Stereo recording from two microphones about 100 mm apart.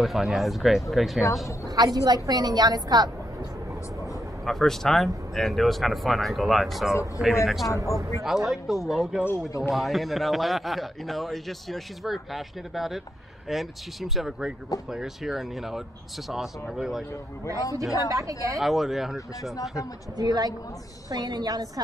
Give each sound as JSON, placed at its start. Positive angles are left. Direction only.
{"t": 0.0, "sound": "speech", "side_deg": -5}
{"t": 1.8, "sound": "a woman's voice", "side_deg": -40}
{"t": 4.0, "sound": "speech", "side_deg": 5}
{"t": 7.2, "sound": "speech", "side_deg": -15}
{"t": 7.8, "sound": "speech", "side_deg": -30}
{"t": 8.2, "sound": "speech", "side_deg": -5}
{"t": 17.9, "sound": "a woman's voice", "side_deg": -35}
{"t": 18.6, "sound": "speech", "side_deg": 0}
{"t": 20.2, "sound": "a woman's voice", "side_deg": -40}